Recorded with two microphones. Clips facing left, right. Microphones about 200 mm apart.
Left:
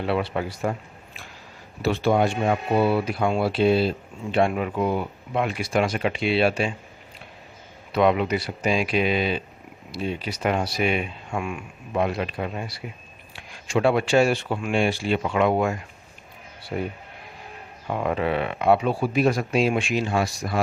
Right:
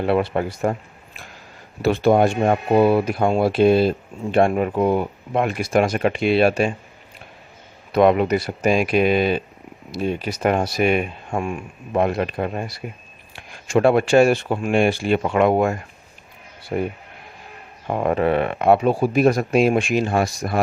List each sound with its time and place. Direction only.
0.0 s speech: 50° right (ahead or behind)
7.9 s speech: 50° right (ahead or behind)